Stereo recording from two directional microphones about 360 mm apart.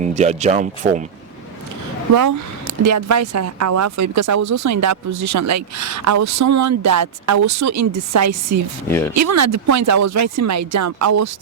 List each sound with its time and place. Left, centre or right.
0.0 s speech: centre
2.1 s speech: right
8.9 s speech: centre
9.1 s speech: right